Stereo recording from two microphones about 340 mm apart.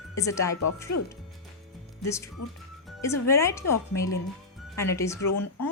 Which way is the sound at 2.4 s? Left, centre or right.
Left.